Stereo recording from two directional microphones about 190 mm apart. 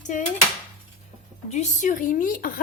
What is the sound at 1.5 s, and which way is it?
Speech, 40° left (ahead or behind).